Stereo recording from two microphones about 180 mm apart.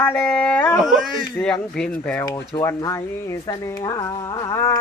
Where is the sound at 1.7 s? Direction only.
5° left (ahead or behind).